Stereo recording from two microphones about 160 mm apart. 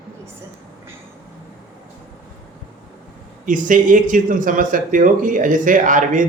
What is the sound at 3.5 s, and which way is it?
Speech, 55° right (ahead or behind).